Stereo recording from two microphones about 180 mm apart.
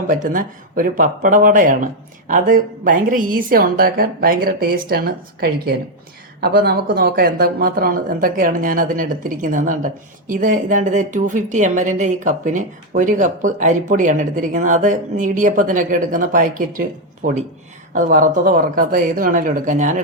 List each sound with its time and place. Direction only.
0.1 s speech: 50° right (ahead or behind)